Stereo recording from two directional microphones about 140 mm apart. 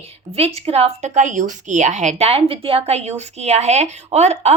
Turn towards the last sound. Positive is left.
turn(degrees=-50)  # may be behind; listen again after turning